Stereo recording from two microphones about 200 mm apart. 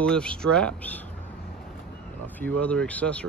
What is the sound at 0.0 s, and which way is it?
Speech, 5° left (ahead or behind).